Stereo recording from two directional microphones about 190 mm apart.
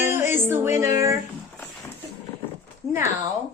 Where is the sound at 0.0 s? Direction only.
10° right (ahead or behind).